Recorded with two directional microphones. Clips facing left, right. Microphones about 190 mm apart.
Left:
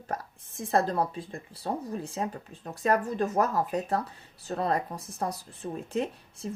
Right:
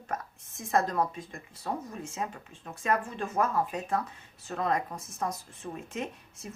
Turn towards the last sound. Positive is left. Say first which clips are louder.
# left 5 dB
turn(degrees=35)  # may be behind; listen again after turning